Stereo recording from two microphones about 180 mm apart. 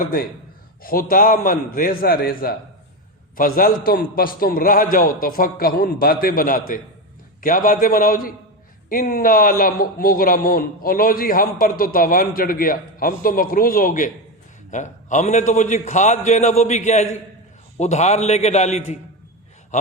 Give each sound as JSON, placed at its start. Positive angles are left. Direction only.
{"t": 0.0, "sound": "a man's voice", "side_deg": 55}